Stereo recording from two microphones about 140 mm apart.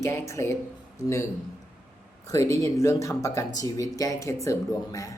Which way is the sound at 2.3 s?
20° left (ahead or behind).